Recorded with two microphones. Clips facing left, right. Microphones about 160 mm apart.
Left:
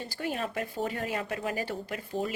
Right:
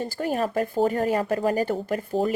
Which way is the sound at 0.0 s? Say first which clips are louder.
Right 8 dB; 45° right (ahead or behind).